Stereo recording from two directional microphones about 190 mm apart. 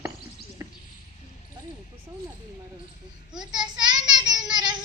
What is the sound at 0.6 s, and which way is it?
Basketball bounce, 15° right (ahead or behind).